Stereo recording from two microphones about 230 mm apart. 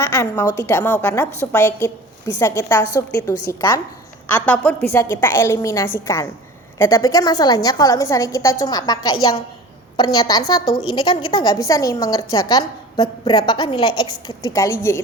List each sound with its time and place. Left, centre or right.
0.0 s a woman's voice: centre
4.3 s a woman's voice: centre